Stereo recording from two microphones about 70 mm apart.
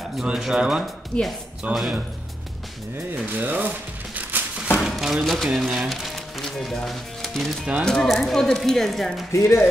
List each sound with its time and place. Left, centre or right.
0.2 s speech: centre
1.1 s speech: centre
1.6 s speech: centre
3.3 s a sound: right
4.7 s speech: centre
9.3 s speech: left